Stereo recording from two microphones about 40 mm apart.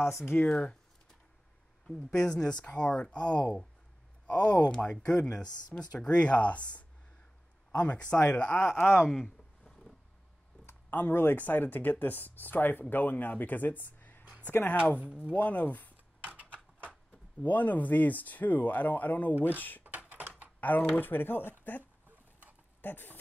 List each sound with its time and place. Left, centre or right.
0.0 s speech: left
0.5 s speech: left
1.9 s speech: centre
2.1 s speech: centre
8.7 s speech: left
9.7 s a sound: centre
10.9 s speech: left
15.0 s speech: right
15.3 s speech: left
16.3 s typing: right
17.4 s speech: left
19.8 s a sound: right
20.9 s speech: left